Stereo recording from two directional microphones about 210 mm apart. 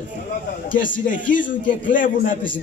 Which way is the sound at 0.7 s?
40° left (ahead or behind).